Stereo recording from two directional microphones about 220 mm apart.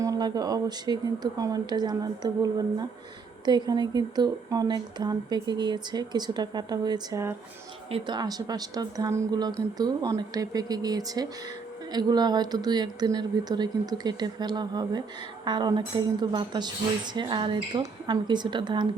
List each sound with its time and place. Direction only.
0.0 s a woman's voice: 15° right (ahead or behind)